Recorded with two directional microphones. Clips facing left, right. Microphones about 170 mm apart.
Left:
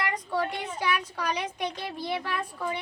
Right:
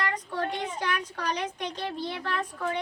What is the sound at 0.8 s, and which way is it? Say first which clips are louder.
A child's voice: left 5 dB; 10° left (ahead or behind).